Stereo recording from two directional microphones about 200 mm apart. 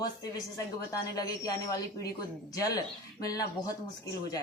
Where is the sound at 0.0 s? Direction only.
20° left (ahead or behind).